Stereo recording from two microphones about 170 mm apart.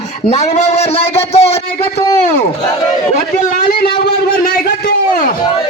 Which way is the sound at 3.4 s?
60° left (ahead or behind).